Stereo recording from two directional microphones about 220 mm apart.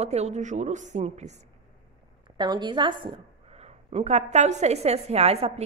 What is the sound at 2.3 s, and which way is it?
A woman's voice, 20° right (ahead or behind).